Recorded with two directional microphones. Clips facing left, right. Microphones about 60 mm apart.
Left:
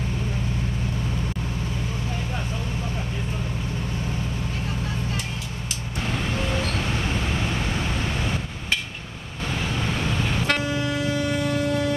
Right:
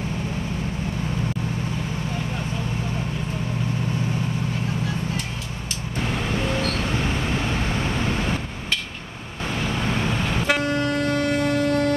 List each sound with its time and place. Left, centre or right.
6.9 s vehicle: centre
10.0 s vehicle: centre
11.2 s vehicle: right